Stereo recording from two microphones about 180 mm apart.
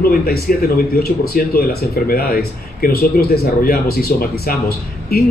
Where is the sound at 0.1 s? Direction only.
55° left (ahead or behind).